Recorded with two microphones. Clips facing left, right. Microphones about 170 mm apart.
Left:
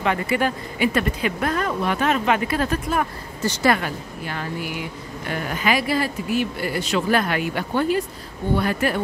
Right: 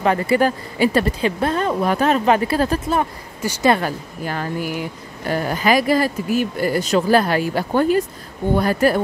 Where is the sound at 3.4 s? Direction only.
15° right (ahead or behind).